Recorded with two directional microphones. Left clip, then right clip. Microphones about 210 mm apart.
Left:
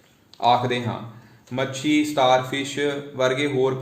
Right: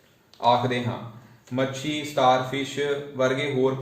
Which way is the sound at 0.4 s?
55° left (ahead or behind).